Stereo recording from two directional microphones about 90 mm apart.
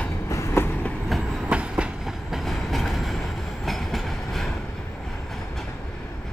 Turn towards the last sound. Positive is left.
turn(degrees=0)  # may be behind; listen again after turning